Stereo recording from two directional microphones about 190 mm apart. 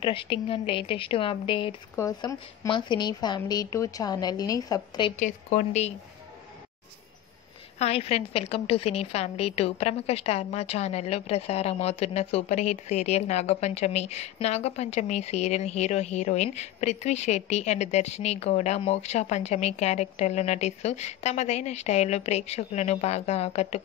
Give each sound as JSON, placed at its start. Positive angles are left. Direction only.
{"t": 0.0, "sound": "a woman's voice", "side_deg": 30}
{"t": 2.0, "sound": "a woman's voice", "side_deg": 15}
{"t": 5.1, "sound": "a woman's voice", "side_deg": 40}
{"t": 7.8, "sound": "a woman's voice", "side_deg": 30}